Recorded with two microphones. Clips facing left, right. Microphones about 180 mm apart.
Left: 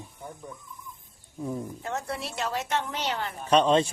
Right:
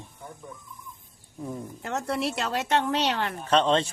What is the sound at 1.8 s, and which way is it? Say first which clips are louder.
A woman's voice: right 8 dB; 80° right.